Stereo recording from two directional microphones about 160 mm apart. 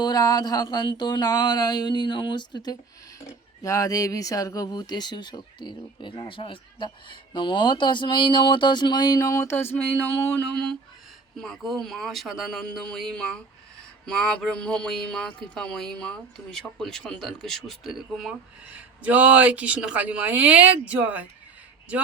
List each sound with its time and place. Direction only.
0.0 s speech: 25° left (ahead or behind); by 21.2 s 10° right (ahead or behind)